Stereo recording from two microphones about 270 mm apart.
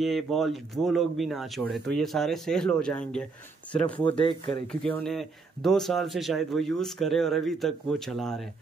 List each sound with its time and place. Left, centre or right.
0.0 s speech: centre
4.0 s speech: centre
4.8 s speech: centre